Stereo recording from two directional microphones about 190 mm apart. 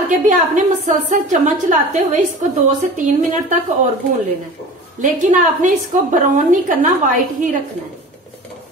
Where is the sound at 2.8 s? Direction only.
40° right (ahead or behind).